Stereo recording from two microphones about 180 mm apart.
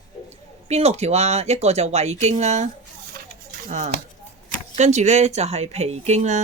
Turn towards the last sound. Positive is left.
turn(degrees=-40)  # may be behind; listen again after turning